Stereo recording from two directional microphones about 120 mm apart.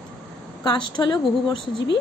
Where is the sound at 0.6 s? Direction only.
35° left (ahead or behind).